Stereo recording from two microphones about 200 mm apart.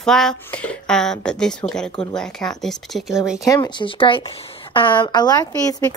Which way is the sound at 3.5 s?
25° left (ahead or behind).